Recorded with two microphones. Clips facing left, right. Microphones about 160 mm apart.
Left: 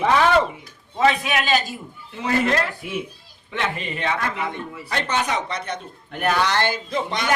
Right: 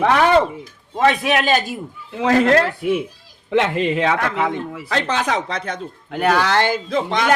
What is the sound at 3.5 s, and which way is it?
Speech, 90° right.